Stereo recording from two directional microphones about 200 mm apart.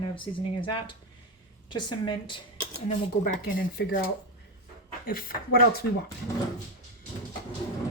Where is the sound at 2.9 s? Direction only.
45° left (ahead or behind).